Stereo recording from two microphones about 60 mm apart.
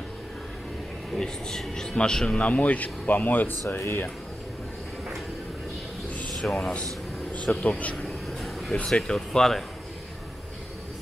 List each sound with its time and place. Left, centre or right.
1.1 s a man's voice: centre; by 3.5 s left
6.3 s speech: centre
7.3 s speech: left
8.4 s a sound: centre
8.7 s a man's voice: centre